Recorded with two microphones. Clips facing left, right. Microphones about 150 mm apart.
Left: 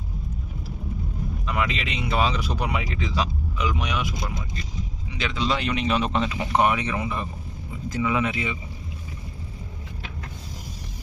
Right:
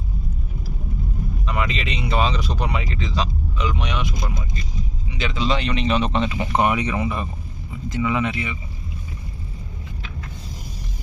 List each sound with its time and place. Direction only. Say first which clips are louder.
1.5 s speech: right 1 dB; centre (ahead or behind)
5.1 s speech: right 2 dB; centre (ahead or behind)
6.7 s speech: right 4 dB; 10° right (ahead or behind)
8.0 s speech: right 2 dB; 5° left (ahead or behind)